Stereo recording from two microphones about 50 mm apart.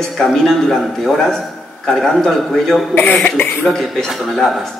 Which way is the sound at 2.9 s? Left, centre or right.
Left.